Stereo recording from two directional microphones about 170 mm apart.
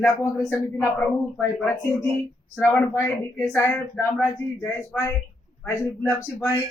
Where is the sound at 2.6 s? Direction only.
15° left (ahead or behind).